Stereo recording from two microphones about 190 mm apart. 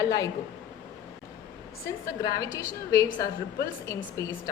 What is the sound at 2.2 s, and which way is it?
A woman's voice, 20° left (ahead or behind).